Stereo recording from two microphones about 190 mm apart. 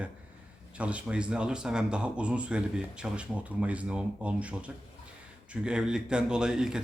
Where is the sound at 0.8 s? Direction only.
5° right (ahead or behind).